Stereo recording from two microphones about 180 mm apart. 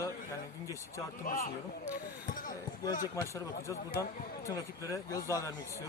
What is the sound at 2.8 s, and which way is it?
A man's voice, 20° left (ahead or behind).